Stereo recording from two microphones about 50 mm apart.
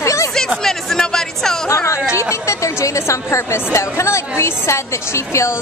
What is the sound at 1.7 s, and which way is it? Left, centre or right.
A woman's voice, left.